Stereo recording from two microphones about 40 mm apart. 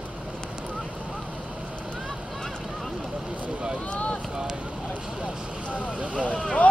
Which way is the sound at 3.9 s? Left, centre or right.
Left.